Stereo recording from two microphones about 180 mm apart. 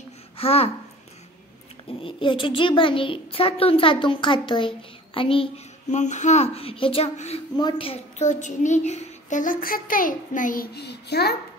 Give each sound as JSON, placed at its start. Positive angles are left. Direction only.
{"t": 0.4, "sound": "speech", "side_deg": 35}
{"t": 1.9, "sound": "a child's voice", "side_deg": 30}